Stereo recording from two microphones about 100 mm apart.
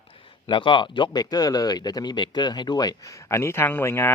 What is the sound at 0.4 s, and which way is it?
Speech, 55° left (ahead or behind).